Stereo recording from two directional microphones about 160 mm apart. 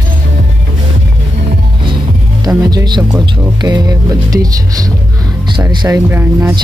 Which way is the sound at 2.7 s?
25° right (ahead or behind).